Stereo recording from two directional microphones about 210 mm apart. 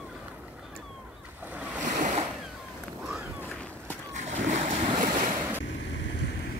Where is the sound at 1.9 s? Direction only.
35° right (ahead or behind).